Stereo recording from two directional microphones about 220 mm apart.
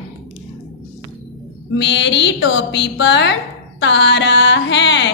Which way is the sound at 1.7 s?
55° left (ahead or behind).